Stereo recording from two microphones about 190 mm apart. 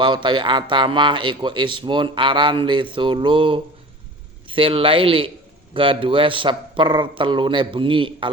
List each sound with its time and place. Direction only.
0.0 s a man's voice: 25° right (ahead or behind)